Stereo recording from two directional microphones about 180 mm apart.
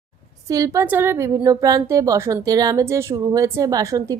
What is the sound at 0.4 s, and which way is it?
A woman's voice, 20° right (ahead or behind).